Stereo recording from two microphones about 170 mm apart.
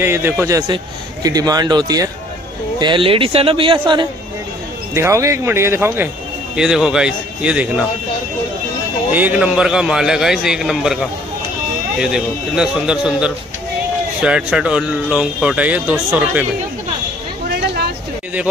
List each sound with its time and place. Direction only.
0.0 s a man's voice: 15° right (ahead or behind)
4.9 s speech: 15° right (ahead or behind)
6.5 s a man's voice: 5° right (ahead or behind)
9.1 s a man's voice: 10° right (ahead or behind)
17.5 s a sound: 70° right (ahead or behind)